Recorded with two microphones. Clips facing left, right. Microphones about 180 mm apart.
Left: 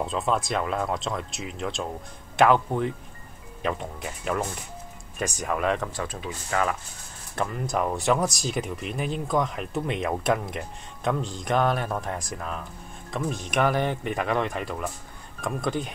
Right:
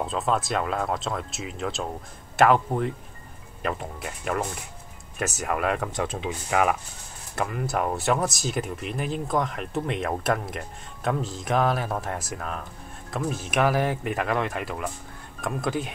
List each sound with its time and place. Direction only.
0.0 s speech: centre (ahead or behind)
5.9 s speech: 20° right (ahead or behind)
7.3 s speech: 5° right (ahead or behind)